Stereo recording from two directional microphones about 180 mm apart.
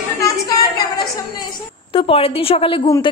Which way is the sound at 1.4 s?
30° left (ahead or behind).